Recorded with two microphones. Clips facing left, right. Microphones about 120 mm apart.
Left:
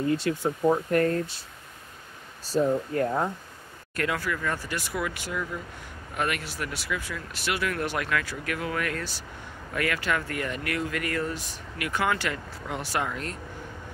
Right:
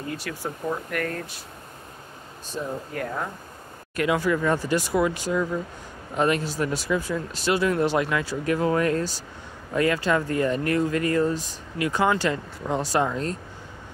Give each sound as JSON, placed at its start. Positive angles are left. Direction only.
{"t": 0.1, "sound": "speech", "side_deg": 25}
{"t": 2.4, "sound": "speech", "side_deg": 35}
{"t": 3.9, "sound": "speech", "side_deg": -20}